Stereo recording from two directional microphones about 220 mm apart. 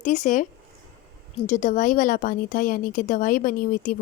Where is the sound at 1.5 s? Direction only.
35° left (ahead or behind).